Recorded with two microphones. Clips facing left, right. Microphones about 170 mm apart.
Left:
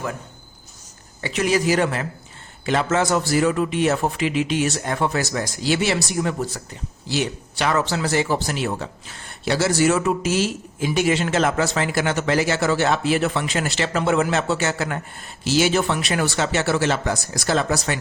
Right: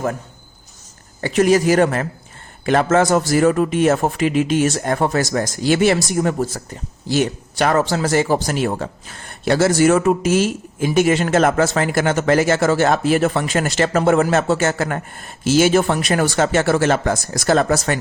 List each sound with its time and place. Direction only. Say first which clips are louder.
1.2 s speech: right 6 dB; 45° right (ahead or behind)